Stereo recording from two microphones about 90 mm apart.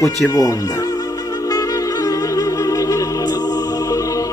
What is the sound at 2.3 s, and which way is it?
Music, 40° left (ahead or behind).